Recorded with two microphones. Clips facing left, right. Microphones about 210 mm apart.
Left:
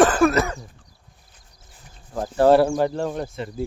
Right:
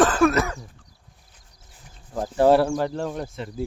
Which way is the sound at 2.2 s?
15° right (ahead or behind).